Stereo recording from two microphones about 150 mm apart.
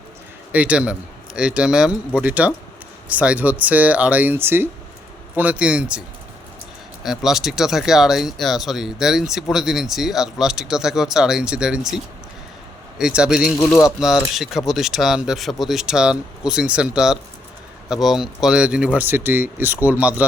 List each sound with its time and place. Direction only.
0.5 s speech: 10° right (ahead or behind)
7.0 s speech: 5° right (ahead or behind)
13.0 s speech: 5° right (ahead or behind)
13.7 s speech: 20° left (ahead or behind)
14.3 s speech: centre (ahead or behind)